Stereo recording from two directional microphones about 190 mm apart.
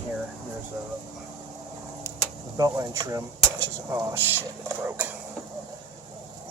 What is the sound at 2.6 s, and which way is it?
Speech, 20° right (ahead or behind).